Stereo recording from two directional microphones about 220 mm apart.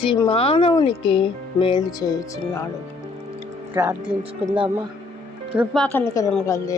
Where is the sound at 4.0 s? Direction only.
25° right (ahead or behind).